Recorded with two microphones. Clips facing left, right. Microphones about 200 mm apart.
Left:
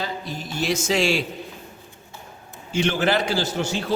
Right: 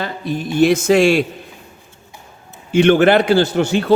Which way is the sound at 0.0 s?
60° right (ahead or behind).